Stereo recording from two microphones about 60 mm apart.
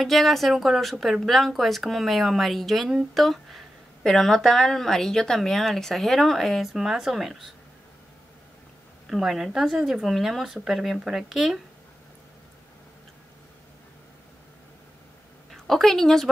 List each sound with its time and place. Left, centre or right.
0.0 s a woman's voice: centre
9.0 s speech: centre
15.5 s a woman's voice: centre